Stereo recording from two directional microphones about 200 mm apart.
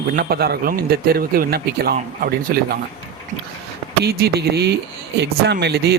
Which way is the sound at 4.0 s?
50° right (ahead or behind).